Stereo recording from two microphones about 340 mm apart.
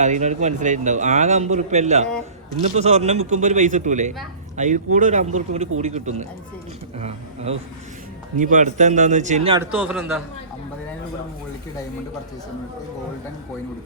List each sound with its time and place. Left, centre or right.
0.0 s a man's voice: right
8.4 s a man's voice: right
9.7 s a man's voice: centre